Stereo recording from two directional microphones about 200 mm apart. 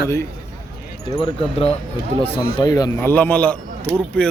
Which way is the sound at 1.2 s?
25° left (ahead or behind).